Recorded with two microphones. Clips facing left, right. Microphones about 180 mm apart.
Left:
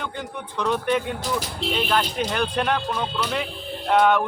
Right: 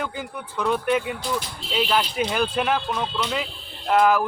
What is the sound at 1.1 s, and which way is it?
Speech, 45° left (ahead or behind).